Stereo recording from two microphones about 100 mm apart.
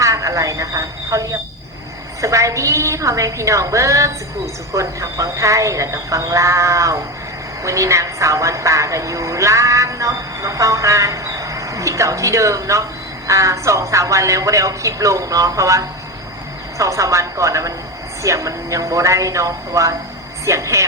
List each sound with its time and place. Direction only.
0.0 s a woman's voice: 35° right (ahead or behind)